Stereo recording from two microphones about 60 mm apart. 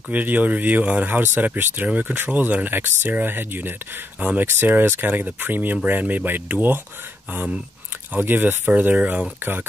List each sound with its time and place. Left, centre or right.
0.1 s speech: right
8.1 s speech: right
9.4 s speech: right